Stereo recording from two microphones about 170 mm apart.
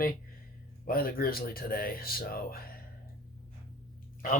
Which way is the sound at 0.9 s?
60° left (ahead or behind).